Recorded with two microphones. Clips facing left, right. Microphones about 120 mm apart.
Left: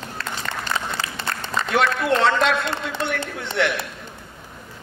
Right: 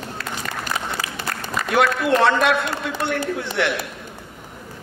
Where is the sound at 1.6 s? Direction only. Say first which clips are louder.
Right 2 dB; 25° left (ahead or behind).